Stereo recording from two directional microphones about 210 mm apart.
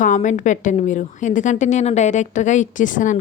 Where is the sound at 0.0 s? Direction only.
35° left (ahead or behind).